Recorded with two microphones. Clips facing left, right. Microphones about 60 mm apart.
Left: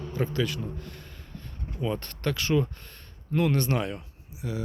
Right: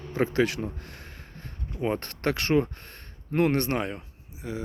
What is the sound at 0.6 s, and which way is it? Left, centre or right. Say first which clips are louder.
Speech: right 2 dB; right.